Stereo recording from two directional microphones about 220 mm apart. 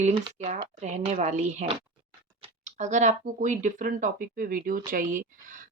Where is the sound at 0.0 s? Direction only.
30° right (ahead or behind).